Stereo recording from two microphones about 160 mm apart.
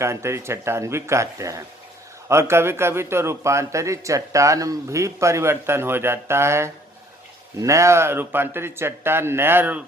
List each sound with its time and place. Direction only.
0.0 s a man's voice: 15° right (ahead or behind)